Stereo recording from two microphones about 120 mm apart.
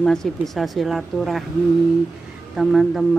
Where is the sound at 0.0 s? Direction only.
5° left (ahead or behind).